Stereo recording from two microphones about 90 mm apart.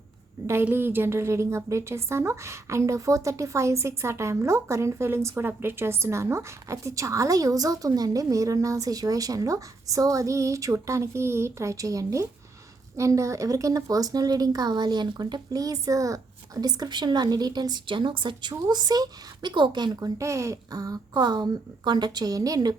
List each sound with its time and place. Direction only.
0.6 s a woman's voice: 25° right (ahead or behind); by 18.5 s 65° right (ahead or behind)
18.7 s speech: 45° right (ahead or behind)
20.0 s speech: 35° right (ahead or behind)